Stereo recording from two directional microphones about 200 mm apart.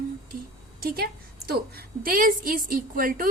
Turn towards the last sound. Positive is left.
turn(degrees=-45)  # may be behind; listen again after turning